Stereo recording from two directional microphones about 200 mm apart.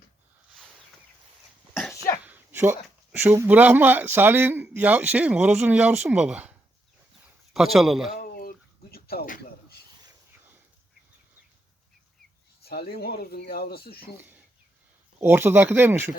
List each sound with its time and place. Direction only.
1.7 s cough: centre (ahead or behind)
2.2 s speech: 10° right (ahead or behind)
7.5 s speech: centre (ahead or behind)
8.1 s a sound: 50° left (ahead or behind)
10.0 s a sound: 10° right (ahead or behind)
12.6 s speech: 50° left (ahead or behind)
14.2 s speech: 10° right (ahead or behind)